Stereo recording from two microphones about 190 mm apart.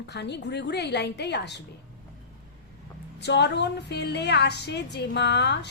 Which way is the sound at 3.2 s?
65° left (ahead or behind).